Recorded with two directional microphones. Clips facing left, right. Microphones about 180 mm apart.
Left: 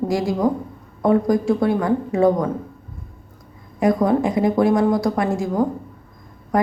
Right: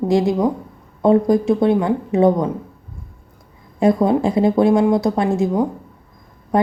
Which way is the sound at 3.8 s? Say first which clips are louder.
Right 2 dB; 25° right (ahead or behind).